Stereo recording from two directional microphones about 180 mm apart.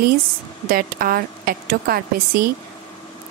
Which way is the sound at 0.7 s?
55° right (ahead or behind).